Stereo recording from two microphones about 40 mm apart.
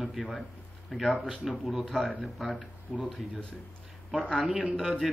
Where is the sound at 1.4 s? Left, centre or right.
Centre.